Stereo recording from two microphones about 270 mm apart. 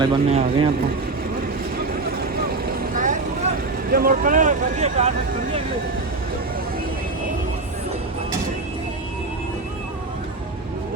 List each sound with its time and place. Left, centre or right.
0.0 s speech: centre
2.9 s vehicle: right
3.9 s speech: right